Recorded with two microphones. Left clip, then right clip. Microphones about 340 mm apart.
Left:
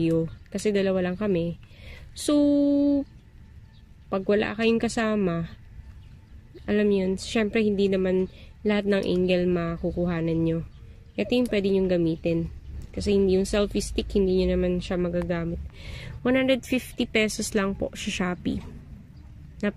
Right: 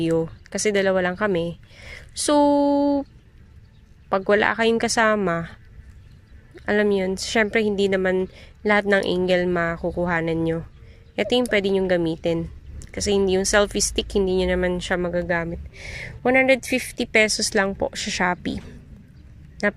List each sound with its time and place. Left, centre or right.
0.6 s speech: centre
2.5 s a sound: right
4.1 s speech: centre
6.7 s speech: centre
9.8 s a sound: right
10.1 s speech: centre